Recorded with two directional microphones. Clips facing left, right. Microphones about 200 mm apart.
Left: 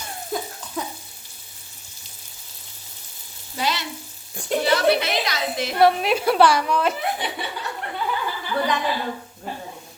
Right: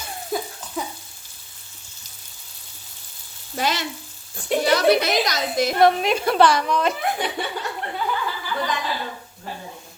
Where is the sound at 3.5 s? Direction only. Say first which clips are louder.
Right 2 dB; 45° right (ahead or behind).